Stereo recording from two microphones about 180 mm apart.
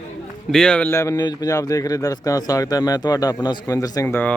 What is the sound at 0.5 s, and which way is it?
A man's voice, 5° left (ahead or behind).